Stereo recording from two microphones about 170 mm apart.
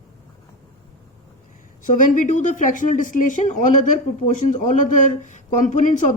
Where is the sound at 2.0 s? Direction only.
50° left (ahead or behind).